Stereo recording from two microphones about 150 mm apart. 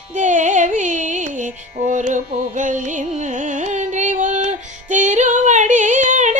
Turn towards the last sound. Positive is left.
turn(degrees=-55)  # may be behind; listen again after turning